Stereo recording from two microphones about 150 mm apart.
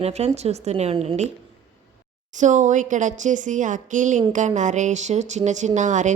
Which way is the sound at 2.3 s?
55° right (ahead or behind).